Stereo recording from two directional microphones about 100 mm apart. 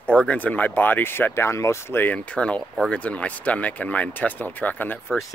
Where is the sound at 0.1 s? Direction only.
15° left (ahead or behind).